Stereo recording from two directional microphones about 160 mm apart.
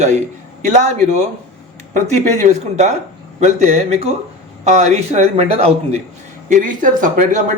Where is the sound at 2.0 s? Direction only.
45° right (ahead or behind).